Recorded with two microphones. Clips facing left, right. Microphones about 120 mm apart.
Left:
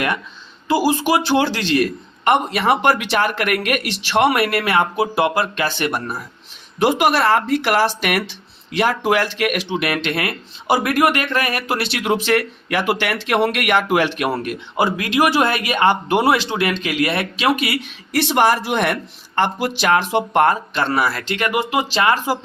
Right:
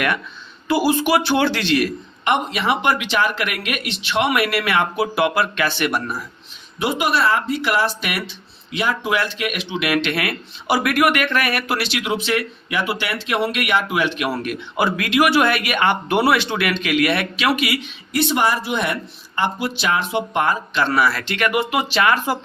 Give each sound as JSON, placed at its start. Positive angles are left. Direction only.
{"t": 0.9, "sound": "speech", "side_deg": 35}
{"t": 9.9, "sound": "speech", "side_deg": 30}
{"t": 11.8, "sound": "speech", "side_deg": 45}
{"t": 14.3, "sound": "speech", "side_deg": 30}
{"t": 18.1, "sound": "speech", "side_deg": 55}
{"t": 21.0, "sound": "speech", "side_deg": 35}